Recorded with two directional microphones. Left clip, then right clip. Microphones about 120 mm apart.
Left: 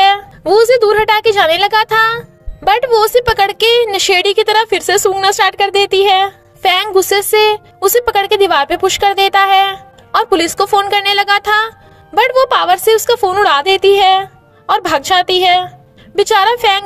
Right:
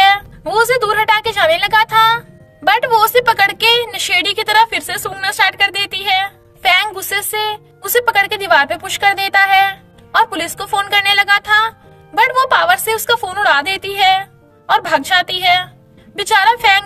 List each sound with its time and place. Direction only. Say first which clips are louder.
0.5 s a woman's voice: left 5 dB; 60° left (ahead or behind)